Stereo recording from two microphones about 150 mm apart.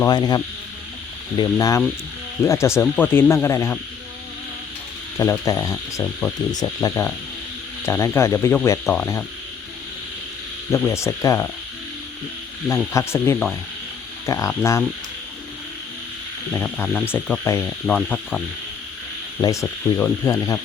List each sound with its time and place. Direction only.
0.1 s cricket: 30° left (ahead or behind)
1.5 s cricket: 20° left (ahead or behind)
2.4 s speech: 20° left (ahead or behind)
5.1 s speech: 15° left (ahead or behind)
6.5 s cricket: 25° left (ahead or behind)
7.9 s speech: 15° left (ahead or behind)
10.7 s speech: 15° left (ahead or behind)
12.9 s speech: 20° left (ahead or behind)
14.3 s cricket: 20° left (ahead or behind)
16.5 s speech: 10° left (ahead or behind)
19.4 s cricket: 20° left (ahead or behind)
19.6 s speech: 10° left (ahead or behind)